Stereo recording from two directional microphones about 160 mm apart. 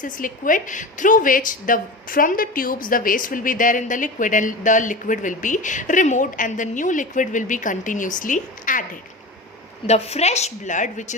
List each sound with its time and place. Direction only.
0.0 s a woman's voice: 55° left (ahead or behind)
9.8 s a woman's voice: 40° left (ahead or behind)